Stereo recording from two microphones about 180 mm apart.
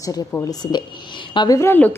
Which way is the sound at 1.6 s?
10° left (ahead or behind).